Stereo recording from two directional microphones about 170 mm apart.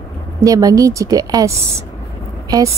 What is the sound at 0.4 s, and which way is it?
Speech, 20° right (ahead or behind).